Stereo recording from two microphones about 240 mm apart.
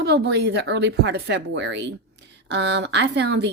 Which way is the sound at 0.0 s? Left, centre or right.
Right.